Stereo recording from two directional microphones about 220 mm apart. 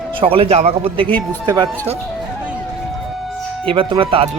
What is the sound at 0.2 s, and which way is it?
Speech, 25° right (ahead or behind).